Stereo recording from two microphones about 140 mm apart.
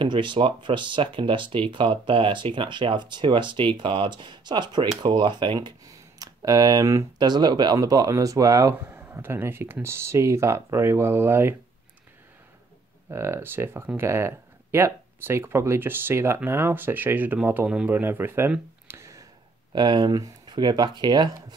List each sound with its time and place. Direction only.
0.0 s speech: 35° right (ahead or behind); by 11.5 s 15° right (ahead or behind)
13.1 s speech: 20° right (ahead or behind)
19.7 s speech: 30° right (ahead or behind)